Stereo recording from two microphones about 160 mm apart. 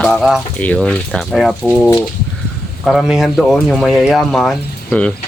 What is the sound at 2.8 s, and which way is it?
Speech, centre (ahead or behind).